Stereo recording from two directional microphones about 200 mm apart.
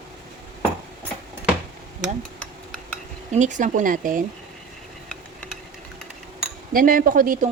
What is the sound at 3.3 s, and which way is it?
Speech, 40° right (ahead or behind).